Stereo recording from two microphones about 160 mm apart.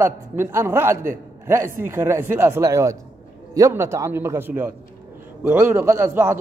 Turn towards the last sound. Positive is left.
turn(degrees=-15)  # may be behind; listen again after turning